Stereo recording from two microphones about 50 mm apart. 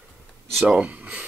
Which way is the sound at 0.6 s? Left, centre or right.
Right.